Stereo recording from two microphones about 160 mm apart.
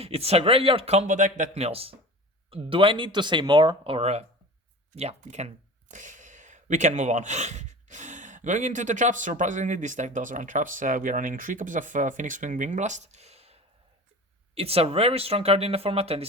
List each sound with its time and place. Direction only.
0.0 s speech: 40° right (ahead or behind)